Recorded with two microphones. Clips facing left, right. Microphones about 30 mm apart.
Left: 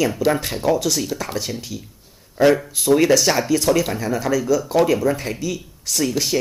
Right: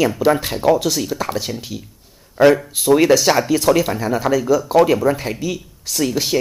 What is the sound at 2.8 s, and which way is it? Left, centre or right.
Speech, centre.